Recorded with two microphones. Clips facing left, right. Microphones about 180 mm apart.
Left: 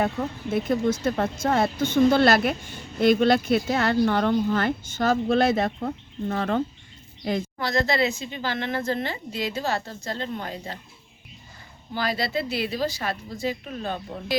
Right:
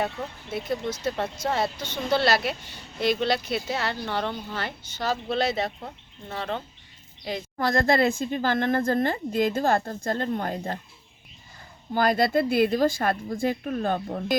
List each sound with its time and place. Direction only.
0.5 s speech: 50° left (ahead or behind)
7.6 s speech: 50° right (ahead or behind)
11.9 s speech: 50° right (ahead or behind)